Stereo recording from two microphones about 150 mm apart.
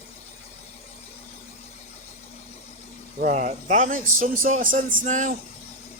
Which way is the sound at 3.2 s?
55° right (ahead or behind).